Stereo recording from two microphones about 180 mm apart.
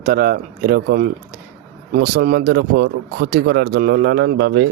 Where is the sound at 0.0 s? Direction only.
50° right (ahead or behind).